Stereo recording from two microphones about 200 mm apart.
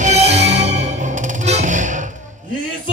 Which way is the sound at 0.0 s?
35° right (ahead or behind).